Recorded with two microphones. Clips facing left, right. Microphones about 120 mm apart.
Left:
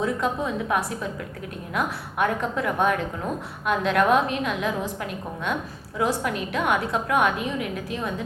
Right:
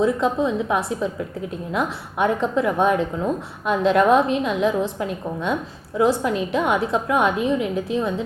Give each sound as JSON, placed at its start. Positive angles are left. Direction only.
{"t": 0.0, "sound": "a woman's voice", "side_deg": -20}